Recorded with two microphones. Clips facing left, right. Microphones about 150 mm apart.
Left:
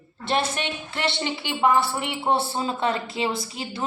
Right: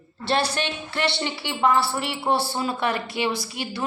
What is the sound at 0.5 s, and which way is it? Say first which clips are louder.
A woman's voice: right 2 dB; 20° left (ahead or behind).